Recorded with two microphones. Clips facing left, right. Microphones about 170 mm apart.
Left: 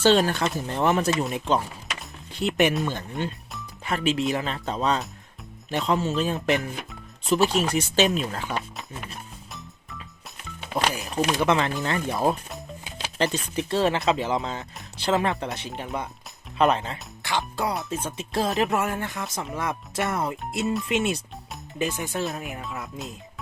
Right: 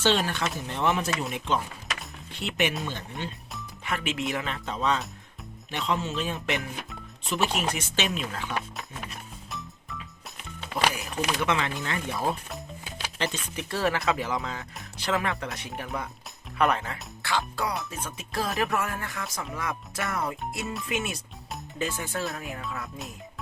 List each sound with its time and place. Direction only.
0.0 s speech: 40° left (ahead or behind)
2.4 s speech: 45° left (ahead or behind)
3.8 s speech: 35° left (ahead or behind)
10.7 s music: 30° left (ahead or behind)
11.1 s speech: 35° left (ahead or behind)
13.6 s speech: 25° left (ahead or behind)